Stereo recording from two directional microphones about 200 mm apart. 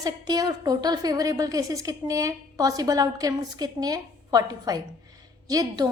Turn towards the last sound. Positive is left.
turn(degrees=-20)  # may be behind; listen again after turning